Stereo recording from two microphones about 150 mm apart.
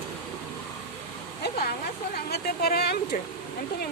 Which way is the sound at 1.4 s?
90° left.